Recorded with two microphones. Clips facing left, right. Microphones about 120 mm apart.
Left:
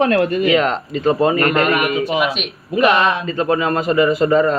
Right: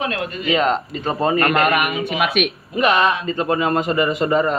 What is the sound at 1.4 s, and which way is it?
Speech, 50° right (ahead or behind).